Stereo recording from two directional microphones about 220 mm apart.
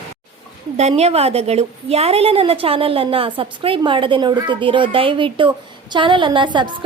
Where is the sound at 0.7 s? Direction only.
30° right (ahead or behind).